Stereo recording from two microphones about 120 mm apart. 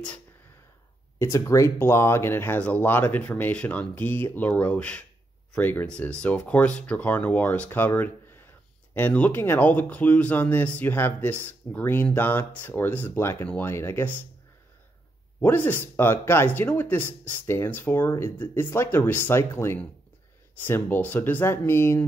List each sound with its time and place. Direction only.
1.2 s speech: 25° left (ahead or behind)
15.4 s speech: 15° left (ahead or behind)